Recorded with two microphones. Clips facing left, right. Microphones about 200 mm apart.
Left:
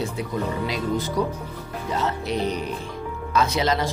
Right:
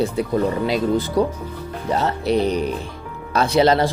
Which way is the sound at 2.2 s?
35° right (ahead or behind).